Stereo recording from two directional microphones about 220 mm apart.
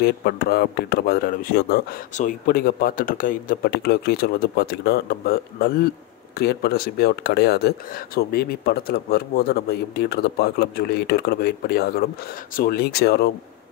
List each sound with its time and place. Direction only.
0.0 s speech: 45° left (ahead or behind)